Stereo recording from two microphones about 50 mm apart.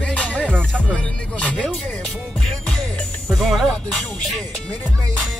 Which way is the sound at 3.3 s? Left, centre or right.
Centre.